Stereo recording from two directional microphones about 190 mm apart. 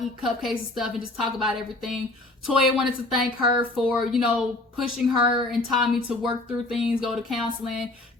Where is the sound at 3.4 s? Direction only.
50° left (ahead or behind).